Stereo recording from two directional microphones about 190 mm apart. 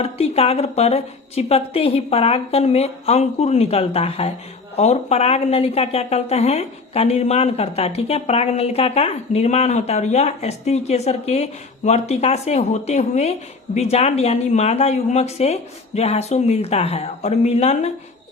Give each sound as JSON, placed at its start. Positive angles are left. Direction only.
{"t": 0.0, "sound": "speech", "side_deg": 30}